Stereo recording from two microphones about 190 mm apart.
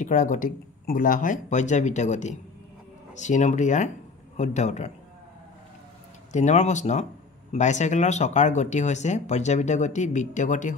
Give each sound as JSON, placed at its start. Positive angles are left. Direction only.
{"t": 0.0, "sound": "speech", "side_deg": 45}
{"t": 6.3, "sound": "speech", "side_deg": 35}